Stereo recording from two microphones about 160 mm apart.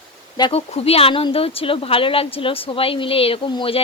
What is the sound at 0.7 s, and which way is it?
A woman's voice, 40° left (ahead or behind).